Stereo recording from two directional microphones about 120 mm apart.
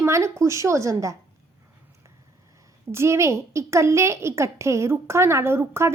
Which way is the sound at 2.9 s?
25° right (ahead or behind).